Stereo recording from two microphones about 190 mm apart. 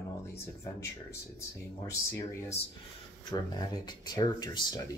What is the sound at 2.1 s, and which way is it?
Speech, 15° left (ahead or behind).